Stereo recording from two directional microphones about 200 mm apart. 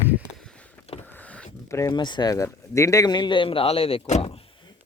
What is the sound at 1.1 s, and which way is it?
Speech, 10° left (ahead or behind).